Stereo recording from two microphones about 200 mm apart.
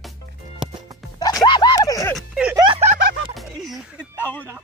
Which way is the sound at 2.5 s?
25° right (ahead or behind).